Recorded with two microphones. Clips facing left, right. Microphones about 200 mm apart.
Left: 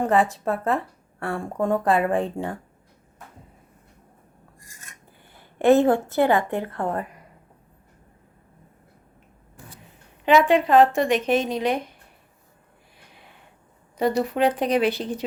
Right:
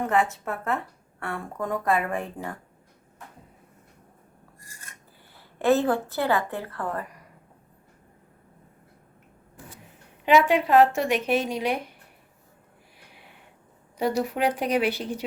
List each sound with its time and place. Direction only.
0.0 s speech: 35° left (ahead or behind)
5.6 s a woman's voice: 20° left (ahead or behind)
10.5 s a woman's voice: 5° right (ahead or behind)
14.0 s a woman's voice: 10° right (ahead or behind)